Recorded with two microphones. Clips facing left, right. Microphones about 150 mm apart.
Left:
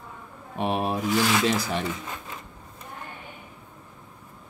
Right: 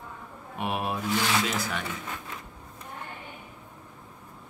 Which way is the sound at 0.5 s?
30° left (ahead or behind).